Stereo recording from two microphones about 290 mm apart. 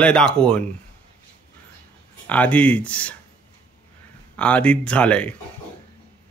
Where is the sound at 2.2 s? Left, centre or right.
Centre.